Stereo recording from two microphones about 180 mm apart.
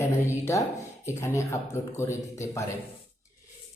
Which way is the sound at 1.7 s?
15° left (ahead or behind).